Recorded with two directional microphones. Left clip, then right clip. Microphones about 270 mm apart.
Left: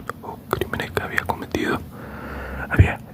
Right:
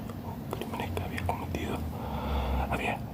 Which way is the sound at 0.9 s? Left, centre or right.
Left.